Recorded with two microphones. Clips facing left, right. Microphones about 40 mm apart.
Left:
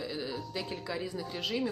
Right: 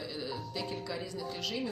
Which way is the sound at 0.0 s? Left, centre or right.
Centre.